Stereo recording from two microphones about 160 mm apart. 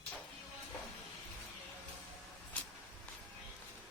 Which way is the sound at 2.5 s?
10° left (ahead or behind).